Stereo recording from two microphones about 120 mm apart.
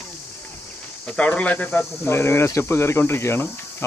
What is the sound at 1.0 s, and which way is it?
Speech, 10° left (ahead or behind).